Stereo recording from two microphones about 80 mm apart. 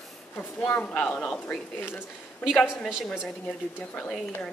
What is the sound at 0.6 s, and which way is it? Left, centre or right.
Speech, centre.